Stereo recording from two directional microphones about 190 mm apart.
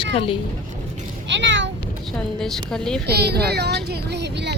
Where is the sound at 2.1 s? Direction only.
Centre (ahead or behind).